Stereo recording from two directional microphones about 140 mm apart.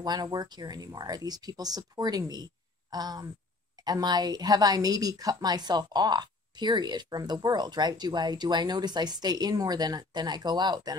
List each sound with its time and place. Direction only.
0.0 s a woman's voice: 30° right (ahead or behind)